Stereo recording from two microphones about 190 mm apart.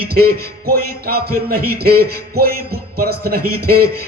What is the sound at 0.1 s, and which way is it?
A man's voice, 55° right (ahead or behind).